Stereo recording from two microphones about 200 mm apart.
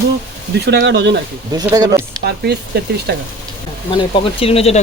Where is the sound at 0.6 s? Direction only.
60° right (ahead or behind).